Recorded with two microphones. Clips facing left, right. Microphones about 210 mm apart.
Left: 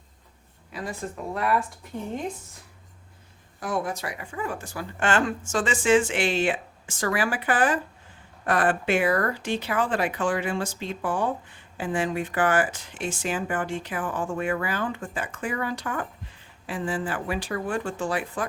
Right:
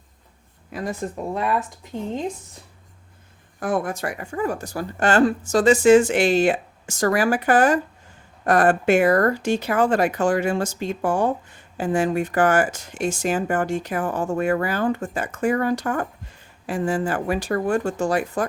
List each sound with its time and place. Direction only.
0.7 s speech: 45° right (ahead or behind)
1.3 s speech: 20° right (ahead or behind)
3.6 s speech: 55° right (ahead or behind)